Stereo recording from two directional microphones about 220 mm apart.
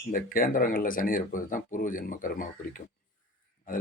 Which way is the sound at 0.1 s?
40° left (ahead or behind).